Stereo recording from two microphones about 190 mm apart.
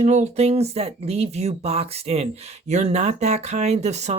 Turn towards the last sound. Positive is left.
turn(degrees=-35)  # may be behind; listen again after turning